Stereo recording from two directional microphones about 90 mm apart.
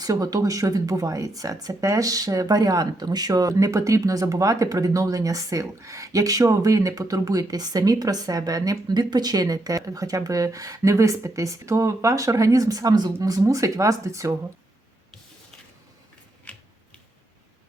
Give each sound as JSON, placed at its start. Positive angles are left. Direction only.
{"t": 0.0, "sound": "speech", "side_deg": -45}
{"t": 16.5, "sound": "typewriter", "side_deg": 15}